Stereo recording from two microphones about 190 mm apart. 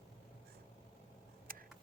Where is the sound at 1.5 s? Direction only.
50° right (ahead or behind).